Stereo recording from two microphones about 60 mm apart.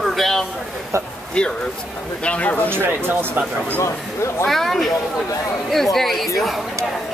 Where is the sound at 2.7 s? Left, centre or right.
Right.